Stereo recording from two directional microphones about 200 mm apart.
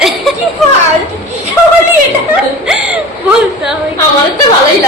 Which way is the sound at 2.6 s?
5° right (ahead or behind).